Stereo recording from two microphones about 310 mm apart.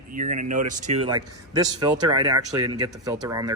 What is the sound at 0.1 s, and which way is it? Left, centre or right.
Speech, right.